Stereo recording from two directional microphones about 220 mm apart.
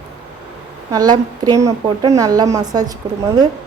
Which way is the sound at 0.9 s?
15° right (ahead or behind).